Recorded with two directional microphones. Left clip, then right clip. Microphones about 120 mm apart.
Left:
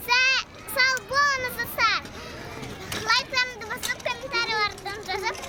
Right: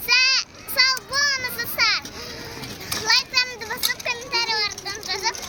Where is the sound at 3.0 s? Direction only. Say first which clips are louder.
Right 3 dB; 10° left (ahead or behind); by 5.3 s 30° left (ahead or behind).